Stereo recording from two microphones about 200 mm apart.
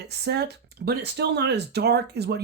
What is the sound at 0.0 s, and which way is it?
Speech, 55° right (ahead or behind).